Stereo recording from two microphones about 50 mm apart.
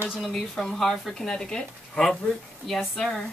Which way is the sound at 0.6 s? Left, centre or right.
Centre.